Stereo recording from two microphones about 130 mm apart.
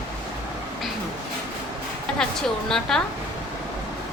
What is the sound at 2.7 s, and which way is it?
Speech, 5° left (ahead or behind).